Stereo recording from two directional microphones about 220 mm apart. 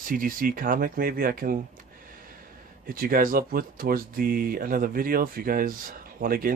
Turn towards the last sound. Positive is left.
turn(degrees=-40)  # may be behind; listen again after turning